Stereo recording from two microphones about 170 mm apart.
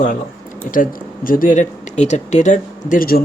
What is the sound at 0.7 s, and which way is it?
Speech, 55° left (ahead or behind).